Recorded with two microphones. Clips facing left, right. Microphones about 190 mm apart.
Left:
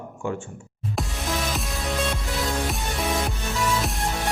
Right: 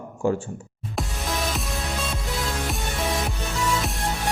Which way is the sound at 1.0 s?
Centre (ahead or behind).